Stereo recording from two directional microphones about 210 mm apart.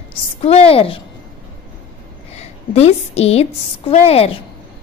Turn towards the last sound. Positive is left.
turn(degrees=30)  # may be behind; listen again after turning